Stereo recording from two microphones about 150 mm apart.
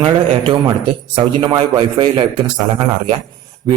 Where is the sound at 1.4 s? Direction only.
30° right (ahead or behind).